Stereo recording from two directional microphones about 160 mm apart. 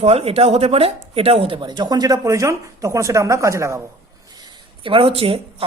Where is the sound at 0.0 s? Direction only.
40° right (ahead or behind).